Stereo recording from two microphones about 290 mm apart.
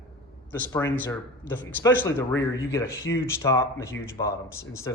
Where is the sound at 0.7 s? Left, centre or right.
Centre.